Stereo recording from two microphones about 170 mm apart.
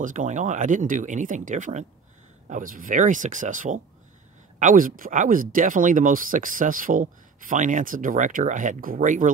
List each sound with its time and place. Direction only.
0.0 s speech: 50° right (ahead or behind)